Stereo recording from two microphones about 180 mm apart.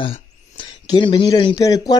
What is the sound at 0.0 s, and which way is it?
Speech, 30° left (ahead or behind).